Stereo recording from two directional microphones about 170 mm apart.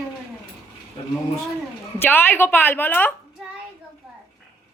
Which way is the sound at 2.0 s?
10° left (ahead or behind).